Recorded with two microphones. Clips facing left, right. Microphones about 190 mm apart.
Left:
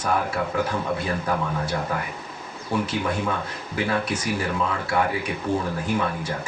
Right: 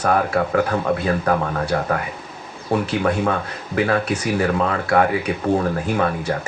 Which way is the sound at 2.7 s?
65° right (ahead or behind).